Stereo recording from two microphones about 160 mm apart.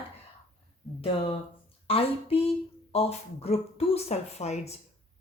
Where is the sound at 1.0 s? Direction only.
35° left (ahead or behind).